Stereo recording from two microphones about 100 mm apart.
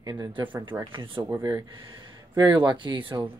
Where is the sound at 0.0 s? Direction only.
55° right (ahead or behind).